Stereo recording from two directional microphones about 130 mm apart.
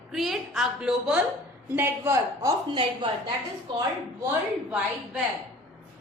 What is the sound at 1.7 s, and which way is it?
Speech, 20° right (ahead or behind).